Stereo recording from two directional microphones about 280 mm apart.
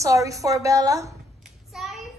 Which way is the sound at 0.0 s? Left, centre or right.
Centre.